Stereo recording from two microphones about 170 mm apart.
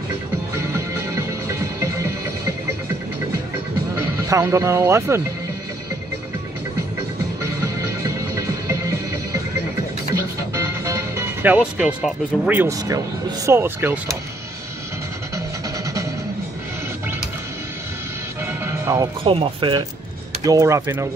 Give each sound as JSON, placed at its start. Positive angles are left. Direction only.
{"t": 0.6, "sound": "music", "side_deg": -15}
{"t": 4.2, "sound": "speech", "side_deg": -20}
{"t": 8.4, "sound": "music", "side_deg": -20}
{"t": 10.5, "sound": "speech", "side_deg": -15}
{"t": 18.6, "sound": "music", "side_deg": -15}
{"t": 19.2, "sound": "speech", "side_deg": -30}
{"t": 20.4, "sound": "speech", "side_deg": -20}